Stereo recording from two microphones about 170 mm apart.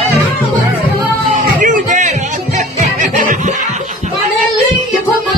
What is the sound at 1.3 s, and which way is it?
Music, 50° right (ahead or behind).